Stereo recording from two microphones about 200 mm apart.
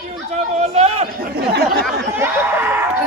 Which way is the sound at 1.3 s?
55° right (ahead or behind).